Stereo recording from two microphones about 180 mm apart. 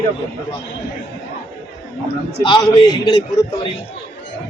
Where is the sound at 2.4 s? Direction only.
25° left (ahead or behind).